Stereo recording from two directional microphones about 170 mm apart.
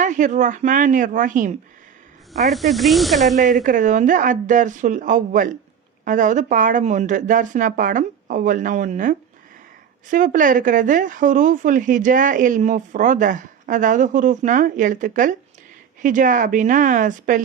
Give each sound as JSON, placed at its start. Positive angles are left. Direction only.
{"t": 0.0, "sound": "speech", "side_deg": -45}
{"t": 2.5, "sound": "speech", "side_deg": 0}
{"t": 3.3, "sound": "speech", "side_deg": -50}